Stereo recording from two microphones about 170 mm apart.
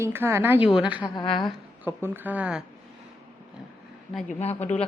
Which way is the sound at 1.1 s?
25° left (ahead or behind).